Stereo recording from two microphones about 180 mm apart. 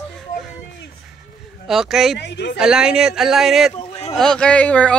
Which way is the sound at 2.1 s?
70° left (ahead or behind).